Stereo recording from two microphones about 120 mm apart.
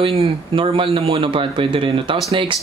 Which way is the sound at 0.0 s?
50° right (ahead or behind).